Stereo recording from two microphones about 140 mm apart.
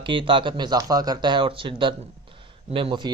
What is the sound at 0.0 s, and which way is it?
Speech, 35° right (ahead or behind).